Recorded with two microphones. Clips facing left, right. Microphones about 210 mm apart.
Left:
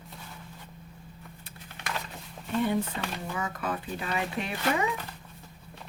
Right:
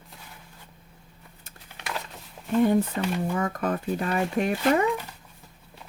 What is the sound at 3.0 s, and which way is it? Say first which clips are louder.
Speech: right 8 dB; 45° right (ahead or behind).